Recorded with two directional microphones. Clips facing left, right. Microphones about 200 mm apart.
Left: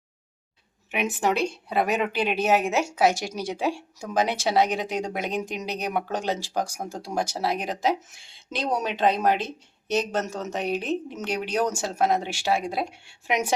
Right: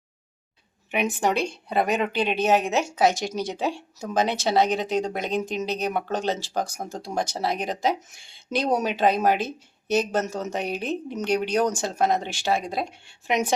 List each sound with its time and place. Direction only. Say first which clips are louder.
0.9 s speech: right 1 dB; 5° left (ahead or behind)